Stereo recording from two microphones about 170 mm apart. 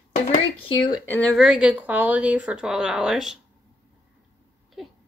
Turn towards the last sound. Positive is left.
turn(degrees=-5)  # may be behind; listen again after turning